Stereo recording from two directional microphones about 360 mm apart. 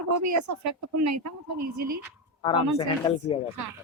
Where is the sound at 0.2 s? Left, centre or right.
Right.